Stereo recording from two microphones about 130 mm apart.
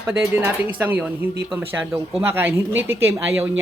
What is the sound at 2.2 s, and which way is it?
Speech, 20° right (ahead or behind).